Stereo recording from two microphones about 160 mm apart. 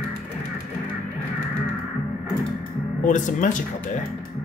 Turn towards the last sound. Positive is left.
turn(degrees=50)  # may be behind; listen again after turning